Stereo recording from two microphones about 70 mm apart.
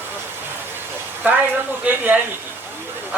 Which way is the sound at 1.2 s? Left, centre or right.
Right.